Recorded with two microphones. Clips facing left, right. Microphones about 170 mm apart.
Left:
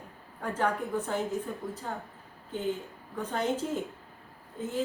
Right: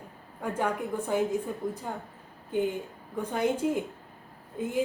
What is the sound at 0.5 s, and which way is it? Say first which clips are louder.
A woman's voice: left 1 dB; 10° right (ahead or behind).